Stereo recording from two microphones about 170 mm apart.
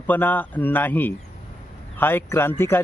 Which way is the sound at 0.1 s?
10° left (ahead or behind).